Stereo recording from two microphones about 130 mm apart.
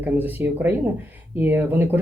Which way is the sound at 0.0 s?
15° right (ahead or behind).